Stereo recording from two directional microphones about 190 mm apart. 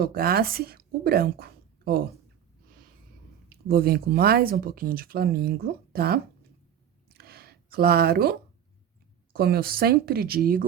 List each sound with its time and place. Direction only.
0.0 s a woman's voice: 55° right (ahead or behind)
3.5 s speech: 55° right (ahead or behind)
7.1 s a sound: 55° right (ahead or behind)
9.3 s speech: 55° right (ahead or behind)